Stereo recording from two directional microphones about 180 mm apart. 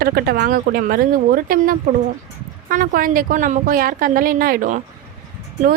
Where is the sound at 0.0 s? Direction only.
55° right (ahead or behind).